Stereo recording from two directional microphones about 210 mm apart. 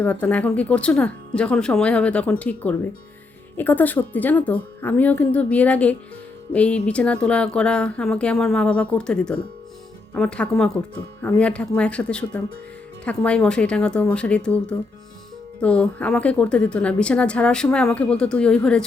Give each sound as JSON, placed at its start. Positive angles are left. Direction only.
{"t": 0.0, "sound": "a woman's voice", "side_deg": 5}